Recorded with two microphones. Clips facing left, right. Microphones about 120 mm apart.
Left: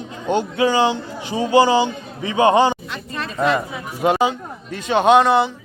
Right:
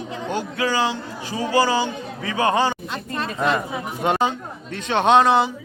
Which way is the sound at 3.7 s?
25° right (ahead or behind).